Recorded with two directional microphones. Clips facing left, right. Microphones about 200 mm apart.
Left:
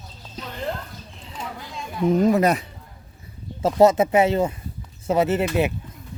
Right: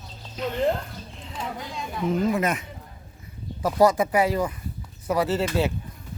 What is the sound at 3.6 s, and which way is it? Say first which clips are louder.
Speech: left 4 dB; 25° left (ahead or behind).